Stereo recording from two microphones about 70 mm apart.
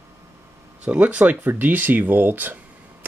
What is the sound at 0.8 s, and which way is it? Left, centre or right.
Speech, centre.